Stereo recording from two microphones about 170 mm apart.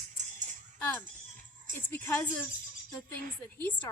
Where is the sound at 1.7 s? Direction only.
50° right (ahead or behind).